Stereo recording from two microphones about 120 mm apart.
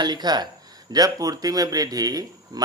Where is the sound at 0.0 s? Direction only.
35° right (ahead or behind).